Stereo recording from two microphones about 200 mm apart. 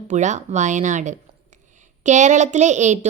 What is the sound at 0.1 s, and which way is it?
A woman's voice, 35° right (ahead or behind).